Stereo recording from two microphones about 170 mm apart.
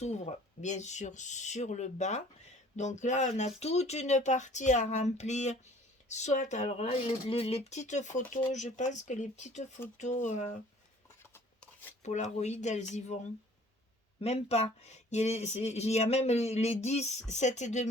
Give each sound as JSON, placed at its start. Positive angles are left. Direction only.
{"t": 0.0, "sound": "speech", "side_deg": 40}
{"t": 11.3, "sound": "a sound", "side_deg": 10}
{"t": 12.0, "sound": "speech", "side_deg": 45}